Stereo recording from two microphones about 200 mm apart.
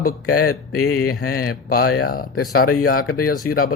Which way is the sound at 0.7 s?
90° left.